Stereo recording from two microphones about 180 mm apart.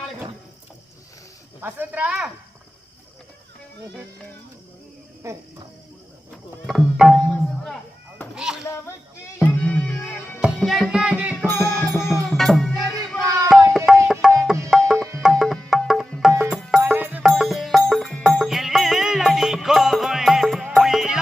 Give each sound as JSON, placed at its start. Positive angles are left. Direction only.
{"t": 1.6, "sound": "speech", "side_deg": -10}
{"t": 5.2, "sound": "cricket", "side_deg": -15}
{"t": 6.3, "sound": "speech", "side_deg": 0}
{"t": 8.4, "sound": "chop", "side_deg": -5}
{"t": 9.4, "sound": "music", "side_deg": 5}
{"t": 10.4, "sound": "music", "side_deg": 0}
{"t": 11.4, "sound": "music", "side_deg": 10}
{"t": 12.3, "sound": "music", "side_deg": 0}
{"t": 13.2, "sound": "a sound", "side_deg": -20}
{"t": 13.9, "sound": "music", "side_deg": -5}